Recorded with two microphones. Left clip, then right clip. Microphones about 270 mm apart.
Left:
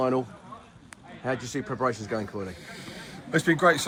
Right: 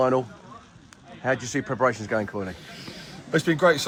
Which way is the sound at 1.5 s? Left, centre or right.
Right.